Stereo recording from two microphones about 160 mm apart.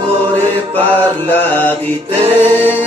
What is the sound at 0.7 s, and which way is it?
Mantra, 10° left (ahead or behind).